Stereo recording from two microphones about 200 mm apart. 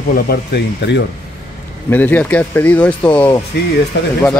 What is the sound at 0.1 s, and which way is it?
Speech, 55° left (ahead or behind).